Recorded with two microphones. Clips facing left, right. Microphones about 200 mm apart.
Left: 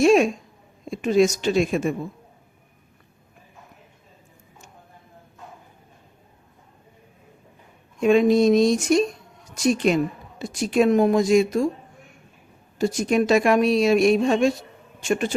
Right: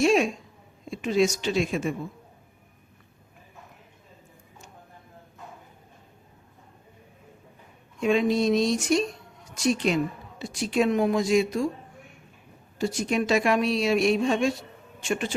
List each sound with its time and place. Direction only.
0.0 s a sound: 45° left (ahead or behind)
0.9 s a woman's voice: 45° left (ahead or behind)
8.0 s a woman's voice: 45° left (ahead or behind)
12.8 s a woman's voice: 45° left (ahead or behind)